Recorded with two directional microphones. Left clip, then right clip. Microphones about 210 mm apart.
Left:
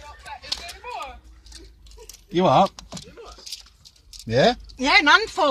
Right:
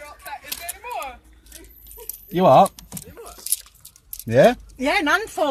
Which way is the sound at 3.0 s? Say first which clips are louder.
Right 2 dB; 45° right (ahead or behind).